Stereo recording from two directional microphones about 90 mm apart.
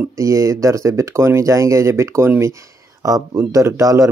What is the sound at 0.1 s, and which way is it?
Speech, 35° right (ahead or behind).